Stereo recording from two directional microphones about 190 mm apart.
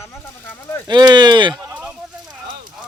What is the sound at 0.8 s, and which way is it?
Speech, 20° right (ahead or behind).